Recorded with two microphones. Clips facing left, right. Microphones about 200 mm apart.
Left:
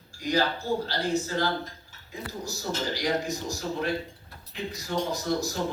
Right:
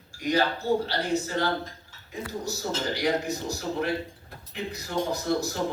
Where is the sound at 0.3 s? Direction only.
60° right (ahead or behind).